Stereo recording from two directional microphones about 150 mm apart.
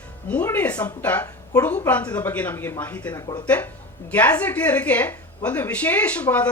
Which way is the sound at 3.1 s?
30° left (ahead or behind).